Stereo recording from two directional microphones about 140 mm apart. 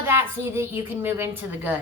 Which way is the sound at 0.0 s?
15° right (ahead or behind).